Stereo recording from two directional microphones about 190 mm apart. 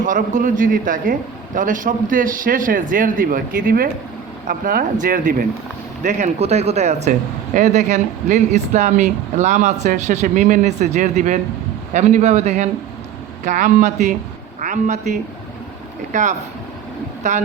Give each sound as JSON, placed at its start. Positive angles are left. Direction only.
{"t": 0.0, "sound": "a man's voice", "side_deg": -45}